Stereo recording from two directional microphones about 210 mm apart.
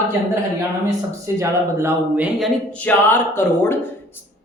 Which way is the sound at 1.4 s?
10° right (ahead or behind).